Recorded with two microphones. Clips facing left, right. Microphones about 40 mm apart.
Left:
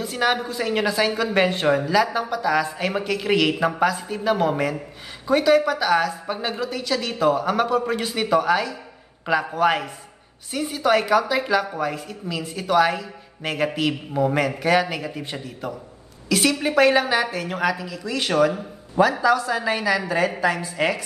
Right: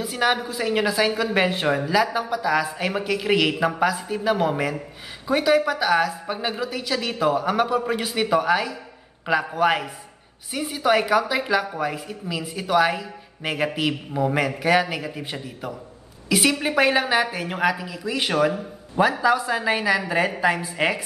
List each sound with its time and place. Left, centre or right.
0.0 s a woman's voice: centre